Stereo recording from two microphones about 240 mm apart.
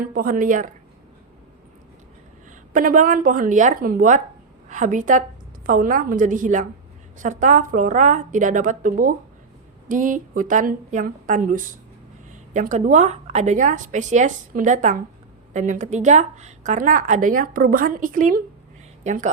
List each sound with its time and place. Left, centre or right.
0.0 s speech: right
2.7 s speech: right